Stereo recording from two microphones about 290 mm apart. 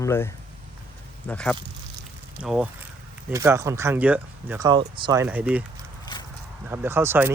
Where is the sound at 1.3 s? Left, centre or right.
Centre.